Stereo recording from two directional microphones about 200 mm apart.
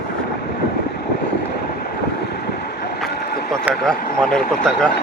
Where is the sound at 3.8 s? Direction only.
5° left (ahead or behind).